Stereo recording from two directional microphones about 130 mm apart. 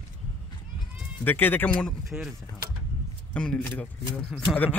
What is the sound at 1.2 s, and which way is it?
Speech, 15° left (ahead or behind).